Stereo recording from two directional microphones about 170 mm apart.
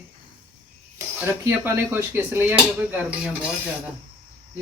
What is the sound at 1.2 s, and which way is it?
Speech, 15° right (ahead or behind).